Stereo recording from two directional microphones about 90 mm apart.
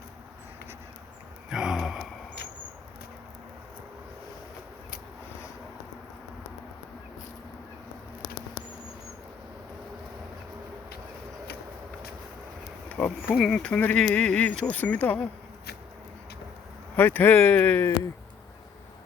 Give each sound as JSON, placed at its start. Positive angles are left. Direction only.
{"t": 1.5, "sound": "a sound", "side_deg": -5}
{"t": 12.9, "sound": "bee", "side_deg": 20}
{"t": 13.2, "sound": "speech", "side_deg": 0}
{"t": 17.0, "sound": "speech", "side_deg": 20}